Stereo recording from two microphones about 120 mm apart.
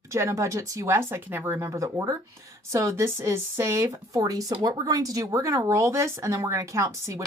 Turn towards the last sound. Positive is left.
turn(degrees=-25)  # may be behind; listen again after turning